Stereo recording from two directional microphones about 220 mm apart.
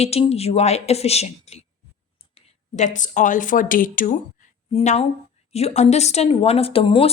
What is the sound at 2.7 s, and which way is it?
Speech, 35° left (ahead or behind).